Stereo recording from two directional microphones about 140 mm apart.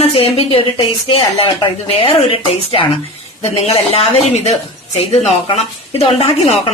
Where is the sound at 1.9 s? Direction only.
40° left (ahead or behind).